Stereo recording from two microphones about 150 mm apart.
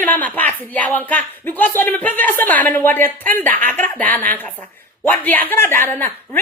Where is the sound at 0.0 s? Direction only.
10° left (ahead or behind).